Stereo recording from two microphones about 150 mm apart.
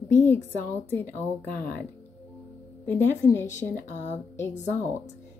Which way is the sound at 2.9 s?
15° left (ahead or behind).